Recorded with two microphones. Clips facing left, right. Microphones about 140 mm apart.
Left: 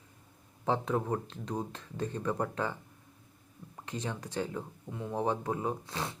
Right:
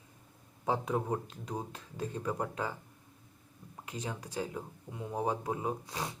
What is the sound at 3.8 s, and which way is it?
Speech, 10° right (ahead or behind).